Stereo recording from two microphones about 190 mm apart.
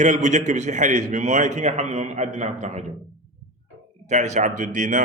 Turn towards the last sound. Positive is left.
turn(degrees=-40)  # may be behind; listen again after turning